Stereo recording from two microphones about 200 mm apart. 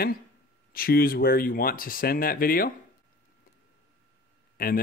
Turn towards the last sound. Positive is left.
turn(degrees=50)  # may be behind; listen again after turning